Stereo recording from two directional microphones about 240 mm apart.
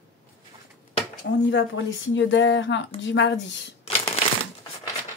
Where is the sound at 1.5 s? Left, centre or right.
Left.